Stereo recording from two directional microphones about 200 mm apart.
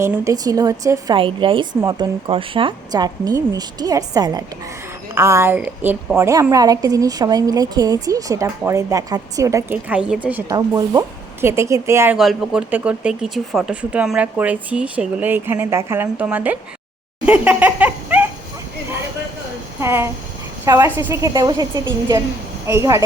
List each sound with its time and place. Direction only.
0.0 s a woman's voice: 15° right (ahead or behind)
10.5 s a woman's voice: 20° right (ahead or behind)
12.1 s a woman's voice: centre (ahead or behind)
17.2 s laughter: 5° right (ahead or behind)
19.8 s a woman's voice: 10° right (ahead or behind)